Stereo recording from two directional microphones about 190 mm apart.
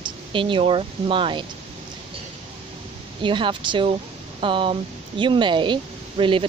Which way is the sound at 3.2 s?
25° right (ahead or behind).